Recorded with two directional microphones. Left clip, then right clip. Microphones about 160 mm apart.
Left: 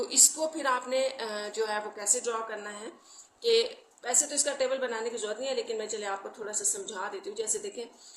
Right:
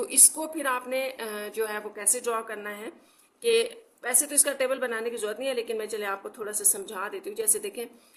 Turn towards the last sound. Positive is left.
turn(degrees=-45)  # may be behind; listen again after turning